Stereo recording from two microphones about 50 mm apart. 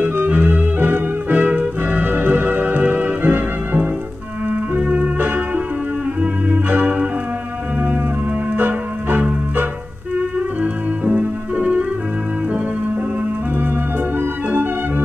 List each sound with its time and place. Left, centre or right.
0.0 s organ: right
4.5 s music: right
8.5 s music: right
14.5 s music: right